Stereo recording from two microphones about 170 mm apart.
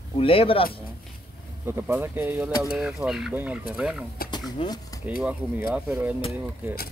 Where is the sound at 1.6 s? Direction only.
10° right (ahead or behind).